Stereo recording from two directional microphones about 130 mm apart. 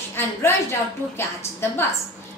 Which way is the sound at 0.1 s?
20° left (ahead or behind).